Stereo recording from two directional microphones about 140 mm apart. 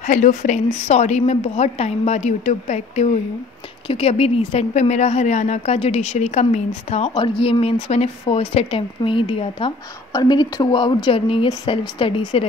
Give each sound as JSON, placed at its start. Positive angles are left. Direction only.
{"t": 0.0, "sound": "a woman's voice", "side_deg": 60}
{"t": 7.2, "sound": "speech", "side_deg": 35}